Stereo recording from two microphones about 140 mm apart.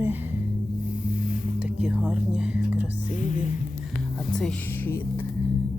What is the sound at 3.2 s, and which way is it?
Music, 65° left (ahead or behind).